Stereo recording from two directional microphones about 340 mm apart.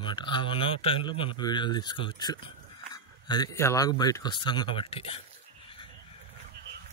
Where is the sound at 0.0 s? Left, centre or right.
Centre.